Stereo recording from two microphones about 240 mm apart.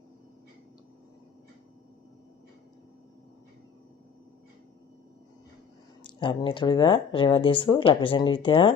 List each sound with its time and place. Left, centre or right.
6.0 s speech: centre